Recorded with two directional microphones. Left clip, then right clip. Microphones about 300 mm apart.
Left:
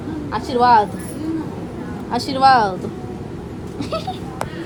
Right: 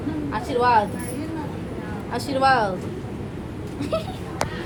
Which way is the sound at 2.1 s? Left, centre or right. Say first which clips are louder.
Left 6 dB; left.